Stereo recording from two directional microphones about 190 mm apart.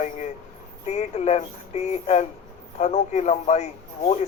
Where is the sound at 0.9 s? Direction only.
35° left (ahead or behind).